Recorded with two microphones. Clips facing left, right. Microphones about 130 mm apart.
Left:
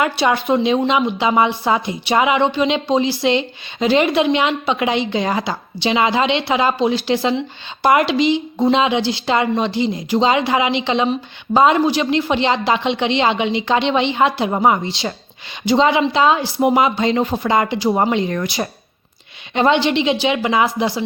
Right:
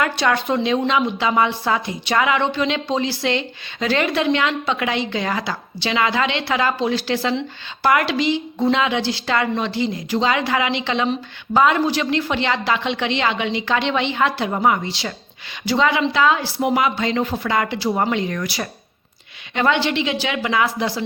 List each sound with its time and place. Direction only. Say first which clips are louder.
0.0 s speech: left 2 dB; 15° left (ahead or behind)